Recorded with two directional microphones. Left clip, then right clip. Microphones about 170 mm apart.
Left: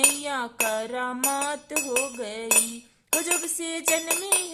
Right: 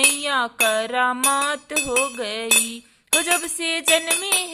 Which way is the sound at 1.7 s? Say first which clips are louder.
Right 5 dB; 15° right (ahead or behind).